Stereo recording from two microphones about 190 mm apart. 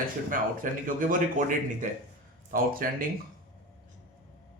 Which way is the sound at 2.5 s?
50° right (ahead or behind).